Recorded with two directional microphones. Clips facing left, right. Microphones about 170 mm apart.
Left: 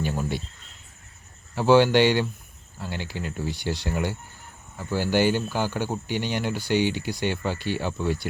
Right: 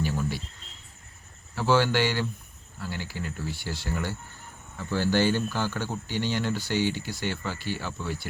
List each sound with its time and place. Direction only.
1.5 s speech: 20° left (ahead or behind)